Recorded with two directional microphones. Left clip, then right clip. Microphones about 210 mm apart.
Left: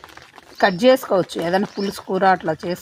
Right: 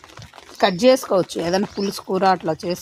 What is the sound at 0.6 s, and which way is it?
Speech, centre (ahead or behind).